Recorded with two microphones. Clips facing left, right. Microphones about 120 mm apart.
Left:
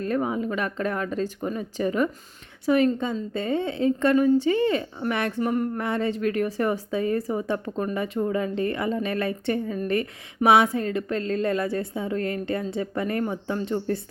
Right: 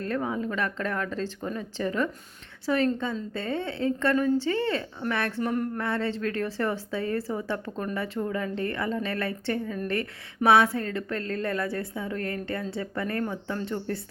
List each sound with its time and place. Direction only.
0.0 s a woman's voice: 15° left (ahead or behind)